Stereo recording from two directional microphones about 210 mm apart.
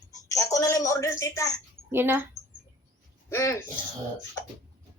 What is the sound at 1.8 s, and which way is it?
Speech, 10° right (ahead or behind).